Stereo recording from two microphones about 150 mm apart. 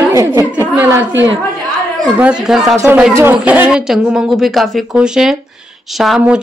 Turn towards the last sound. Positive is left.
turn(degrees=0)  # may be behind; listen again after turning